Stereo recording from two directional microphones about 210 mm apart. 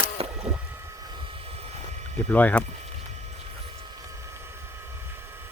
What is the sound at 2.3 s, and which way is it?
Speech, 5° left (ahead or behind).